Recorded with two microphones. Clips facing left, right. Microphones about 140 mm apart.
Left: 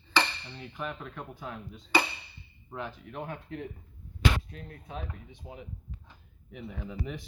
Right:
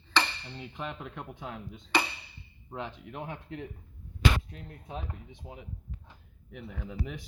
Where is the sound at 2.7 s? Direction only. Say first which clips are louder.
Even; 20° right (ahead or behind).